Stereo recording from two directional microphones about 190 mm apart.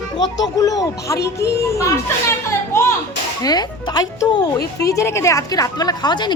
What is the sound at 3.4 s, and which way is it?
Speech, 20° left (ahead or behind).